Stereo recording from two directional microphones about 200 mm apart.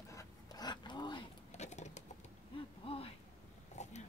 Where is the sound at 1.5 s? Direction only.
35° left (ahead or behind).